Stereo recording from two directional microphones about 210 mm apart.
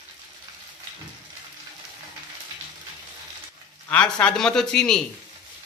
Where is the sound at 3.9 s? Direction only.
5° left (ahead or behind).